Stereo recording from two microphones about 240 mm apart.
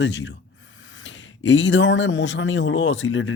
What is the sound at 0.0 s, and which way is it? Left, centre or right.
Speech, left.